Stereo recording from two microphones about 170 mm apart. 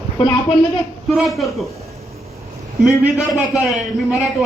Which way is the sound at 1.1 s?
Centre (ahead or behind).